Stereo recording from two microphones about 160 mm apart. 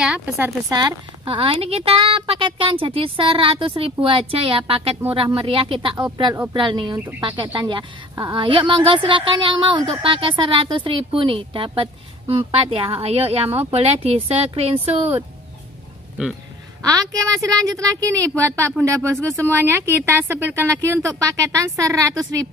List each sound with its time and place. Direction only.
0.0 s speech: 5° right (ahead or behind)
0.7 s a woman's voice: 25° right (ahead or behind)
16.8 s speech: 20° right (ahead or behind)